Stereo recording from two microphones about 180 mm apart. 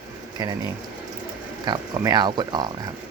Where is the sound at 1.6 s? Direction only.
25° right (ahead or behind).